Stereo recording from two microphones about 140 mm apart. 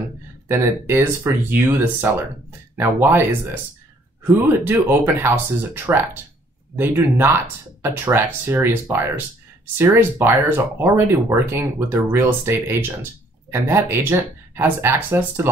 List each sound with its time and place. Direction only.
0.5 s speech: 15° right (ahead or behind)
4.5 s speech: 15° right (ahead or behind)